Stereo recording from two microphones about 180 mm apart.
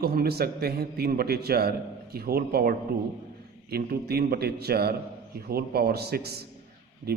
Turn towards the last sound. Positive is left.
turn(degrees=-60)  # may be behind; listen again after turning